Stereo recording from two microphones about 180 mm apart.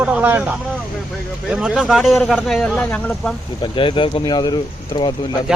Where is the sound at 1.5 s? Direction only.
Centre (ahead or behind).